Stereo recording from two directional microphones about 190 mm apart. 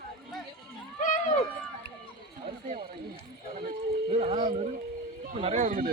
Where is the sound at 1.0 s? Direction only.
45° left (ahead or behind).